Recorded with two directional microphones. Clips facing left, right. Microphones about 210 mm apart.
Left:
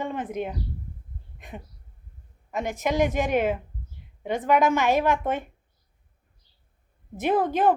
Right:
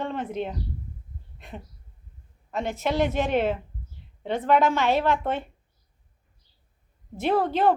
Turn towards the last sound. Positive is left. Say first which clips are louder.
# even
turn(degrees=15)  # may be behind; listen again after turning